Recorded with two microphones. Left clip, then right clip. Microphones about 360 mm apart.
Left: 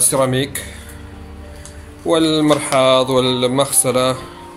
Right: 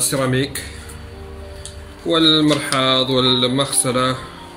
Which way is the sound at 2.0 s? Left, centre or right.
Centre.